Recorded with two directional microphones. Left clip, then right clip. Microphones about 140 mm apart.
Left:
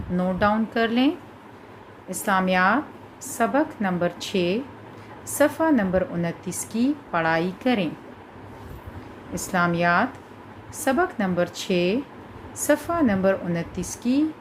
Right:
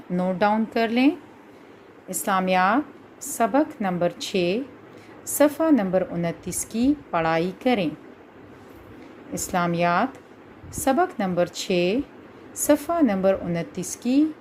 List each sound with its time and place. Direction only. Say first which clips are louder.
0.2 s a woman's voice: right 1 dB; 50° right (ahead or behind)
9.3 s a woman's voice: left 1 dB; 45° right (ahead or behind)